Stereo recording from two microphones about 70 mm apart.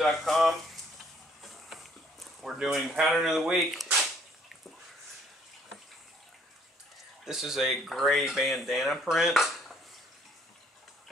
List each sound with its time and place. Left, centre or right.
0.0 s speech: centre
1.5 s a sound: centre
7.2 s speech: centre